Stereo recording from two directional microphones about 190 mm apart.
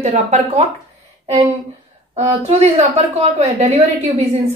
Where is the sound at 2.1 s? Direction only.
35° right (ahead or behind).